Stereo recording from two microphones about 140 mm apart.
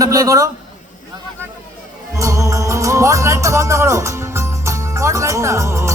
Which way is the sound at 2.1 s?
20° right (ahead or behind).